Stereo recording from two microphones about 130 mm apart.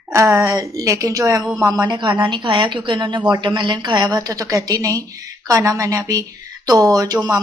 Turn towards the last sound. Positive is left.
turn(degrees=-30)  # may be behind; listen again after turning